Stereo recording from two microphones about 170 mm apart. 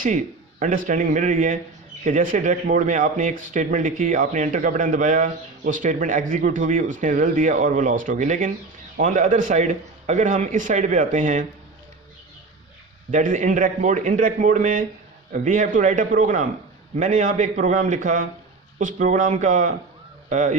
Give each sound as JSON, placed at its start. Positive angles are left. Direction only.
{"t": 0.6, "sound": "speech", "side_deg": -50}
{"t": 13.1, "sound": "speech", "side_deg": -50}